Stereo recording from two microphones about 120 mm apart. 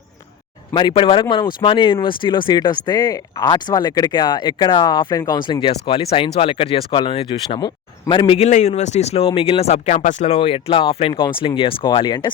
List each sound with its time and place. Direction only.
0.7 s speech: 40° left (ahead or behind)
8.4 s speech: 75° left (ahead or behind)
10.3 s speech: 50° left (ahead or behind)